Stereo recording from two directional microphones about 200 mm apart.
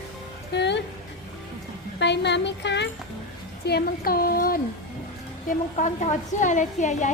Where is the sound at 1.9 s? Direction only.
60° left (ahead or behind); by 7.0 s 40° left (ahead or behind).